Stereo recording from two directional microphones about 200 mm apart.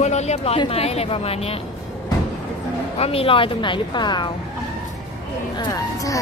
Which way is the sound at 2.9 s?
30° left (ahead or behind).